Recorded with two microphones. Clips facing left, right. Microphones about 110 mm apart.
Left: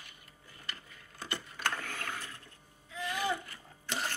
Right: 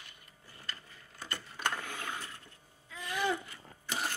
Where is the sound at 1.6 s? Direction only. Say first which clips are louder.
Right 1 dB; 15° right (ahead or behind).